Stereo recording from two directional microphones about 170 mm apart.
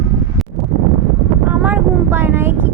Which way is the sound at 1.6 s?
15° right (ahead or behind).